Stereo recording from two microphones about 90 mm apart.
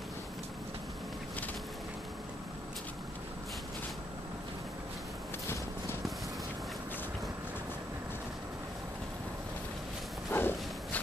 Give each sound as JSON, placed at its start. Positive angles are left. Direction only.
{"t": 10.3, "sound": "walk", "side_deg": 25}